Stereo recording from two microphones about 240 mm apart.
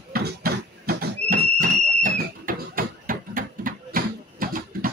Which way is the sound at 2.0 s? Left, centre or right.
Right.